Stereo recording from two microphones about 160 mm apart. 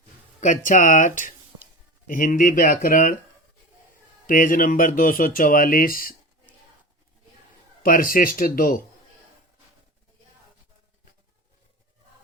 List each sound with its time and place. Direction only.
0.3 s speech: 55° left (ahead or behind)
4.3 s speech: 60° left (ahead or behind)
7.8 s speech: 60° left (ahead or behind)